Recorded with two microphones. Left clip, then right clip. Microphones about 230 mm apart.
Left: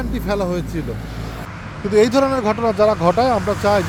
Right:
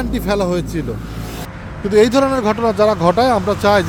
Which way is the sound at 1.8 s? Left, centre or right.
Centre.